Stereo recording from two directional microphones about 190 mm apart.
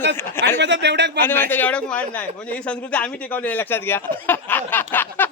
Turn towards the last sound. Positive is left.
turn(degrees=10)  # may be behind; listen again after turning